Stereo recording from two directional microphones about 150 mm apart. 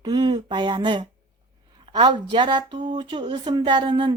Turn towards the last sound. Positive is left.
turn(degrees=-30)  # may be behind; listen again after turning